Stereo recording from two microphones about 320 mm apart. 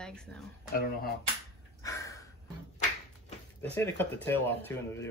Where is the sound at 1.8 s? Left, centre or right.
Centre.